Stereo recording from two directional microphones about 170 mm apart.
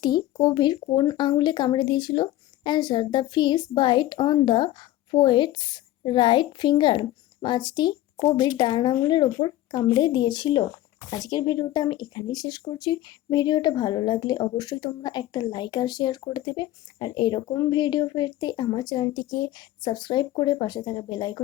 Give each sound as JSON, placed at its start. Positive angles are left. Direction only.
{"t": 0.0, "sound": "speech", "side_deg": 25}